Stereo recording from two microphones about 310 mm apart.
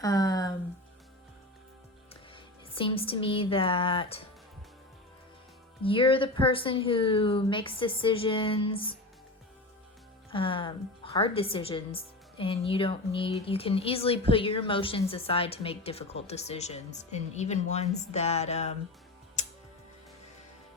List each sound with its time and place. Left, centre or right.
0.0 s a sound: centre
2.3 s speech: centre
5.8 s speech: centre
10.3 s a woman's voice: centre
19.4 s tick-tock: left